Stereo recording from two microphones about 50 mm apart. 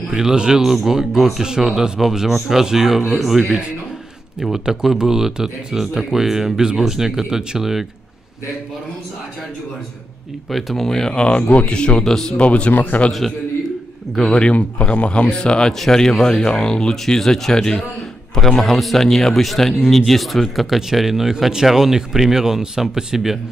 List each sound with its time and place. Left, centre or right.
0.1 s speech: centre
10.5 s speech: centre
12.0 s speech: centre
12.4 s a man's voice: left
14.1 s speech: centre
14.4 s speech: left
18.6 s speech: centre